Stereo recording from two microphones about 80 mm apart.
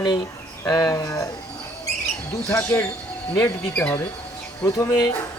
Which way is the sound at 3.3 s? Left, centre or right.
Left.